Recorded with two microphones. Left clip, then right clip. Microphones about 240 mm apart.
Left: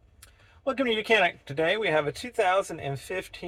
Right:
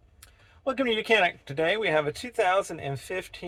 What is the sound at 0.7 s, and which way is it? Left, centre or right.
A man's voice, right.